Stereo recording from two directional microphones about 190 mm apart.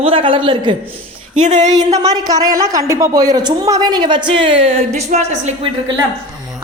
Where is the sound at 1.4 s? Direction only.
40° right (ahead or behind).